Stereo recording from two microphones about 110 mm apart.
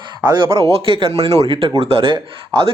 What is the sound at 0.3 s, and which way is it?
Speech, 45° right (ahead or behind).